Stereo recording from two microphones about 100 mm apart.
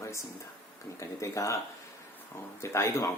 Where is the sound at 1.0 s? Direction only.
30° left (ahead or behind).